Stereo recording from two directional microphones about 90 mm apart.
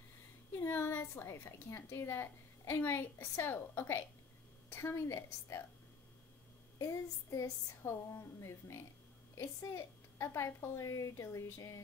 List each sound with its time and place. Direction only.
0.5 s a woman's voice: 25° left (ahead or behind)
6.8 s a woman's voice: 35° left (ahead or behind)